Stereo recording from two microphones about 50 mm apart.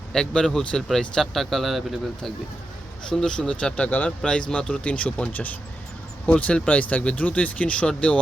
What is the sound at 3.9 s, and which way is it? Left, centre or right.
Speech, left.